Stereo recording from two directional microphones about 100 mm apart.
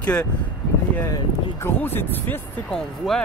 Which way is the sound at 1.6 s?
20° left (ahead or behind).